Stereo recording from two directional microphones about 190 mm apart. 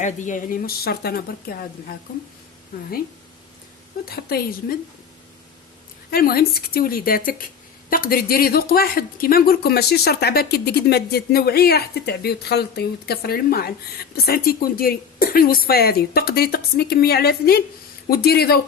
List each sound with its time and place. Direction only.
0.0 s a woman's voice: 40° left (ahead or behind)
2.7 s a woman's voice: 50° left (ahead or behind)
4.1 s speech: 55° left (ahead or behind)
6.1 s a woman's voice: 50° left (ahead or behind)